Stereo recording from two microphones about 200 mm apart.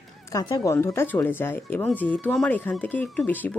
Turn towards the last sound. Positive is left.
turn(degrees=10)  # may be behind; listen again after turning